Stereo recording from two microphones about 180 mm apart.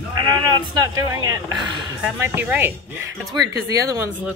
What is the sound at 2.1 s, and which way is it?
Speech, 10° right (ahead or behind).